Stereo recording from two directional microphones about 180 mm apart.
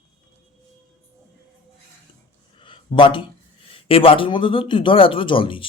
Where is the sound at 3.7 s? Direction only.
30° left (ahead or behind).